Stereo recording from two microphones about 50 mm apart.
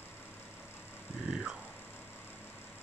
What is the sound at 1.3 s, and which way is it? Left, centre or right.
Speech, centre.